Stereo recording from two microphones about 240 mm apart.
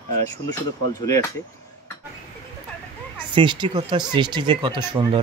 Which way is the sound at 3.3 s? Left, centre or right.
Centre.